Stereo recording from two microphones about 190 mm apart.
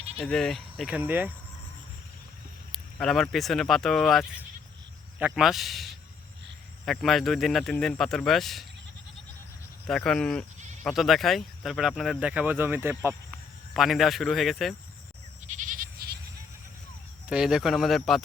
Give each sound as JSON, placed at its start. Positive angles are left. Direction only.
{"t": 0.2, "sound": "speech", "side_deg": 0}
{"t": 2.7, "sound": "speech", "side_deg": 0}
{"t": 9.8, "sound": "speech", "side_deg": 5}
{"t": 15.4, "sound": "goat", "side_deg": -45}
{"t": 17.2, "sound": "speech", "side_deg": -5}